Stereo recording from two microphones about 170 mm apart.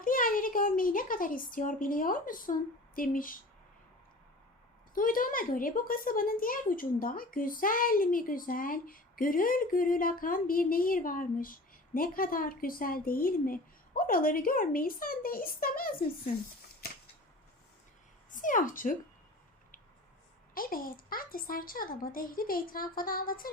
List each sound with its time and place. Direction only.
0.0 s a woman's voice: 55° left (ahead or behind)
4.9 s a woman's voice: 55° left (ahead or behind)
18.3 s speech: 50° left (ahead or behind)
20.5 s a woman's voice: 55° left (ahead or behind)